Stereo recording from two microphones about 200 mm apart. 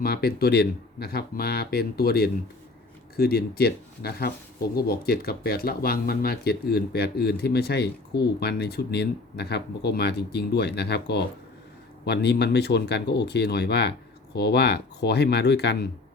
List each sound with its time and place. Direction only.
0.0 s speech: 50° left (ahead or behind)